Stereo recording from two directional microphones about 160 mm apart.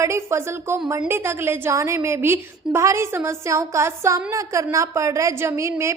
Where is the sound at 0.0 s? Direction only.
15° right (ahead or behind).